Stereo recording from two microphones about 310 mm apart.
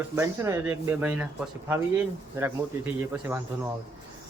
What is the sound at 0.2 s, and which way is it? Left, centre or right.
Speech, centre.